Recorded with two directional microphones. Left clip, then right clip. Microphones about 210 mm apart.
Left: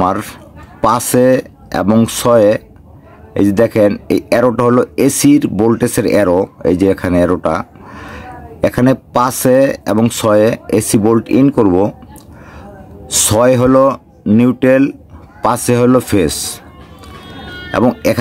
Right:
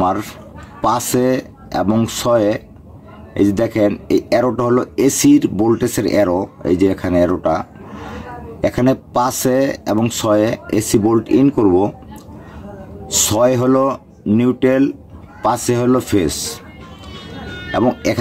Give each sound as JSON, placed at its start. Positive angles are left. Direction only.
{"t": 0.0, "sound": "speech", "side_deg": 45}
{"t": 13.0, "sound": "speech", "side_deg": 45}
{"t": 17.6, "sound": "speech", "side_deg": 45}